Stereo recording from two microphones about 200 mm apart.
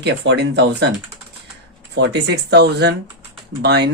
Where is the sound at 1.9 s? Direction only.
60° right (ahead or behind).